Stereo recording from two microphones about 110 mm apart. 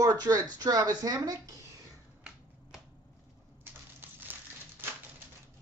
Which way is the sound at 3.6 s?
20° right (ahead or behind).